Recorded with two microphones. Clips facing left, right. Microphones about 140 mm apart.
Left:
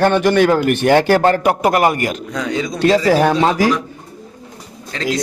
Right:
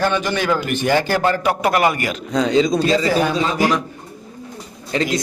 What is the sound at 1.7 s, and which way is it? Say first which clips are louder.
Speech: left 3 dB; 45° left (ahead or behind).